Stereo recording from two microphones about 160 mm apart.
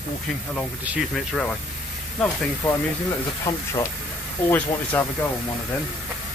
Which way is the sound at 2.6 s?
10° left (ahead or behind).